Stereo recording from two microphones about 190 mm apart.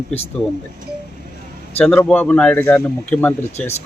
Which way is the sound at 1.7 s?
5° left (ahead or behind).